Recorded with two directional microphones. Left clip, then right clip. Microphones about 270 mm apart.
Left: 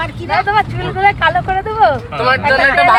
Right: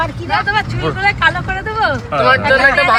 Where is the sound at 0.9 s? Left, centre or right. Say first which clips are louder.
Left 3 dB; centre.